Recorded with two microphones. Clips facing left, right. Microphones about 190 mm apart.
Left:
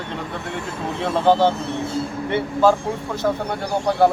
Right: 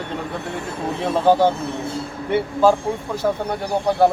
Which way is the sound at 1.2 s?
10° right (ahead or behind).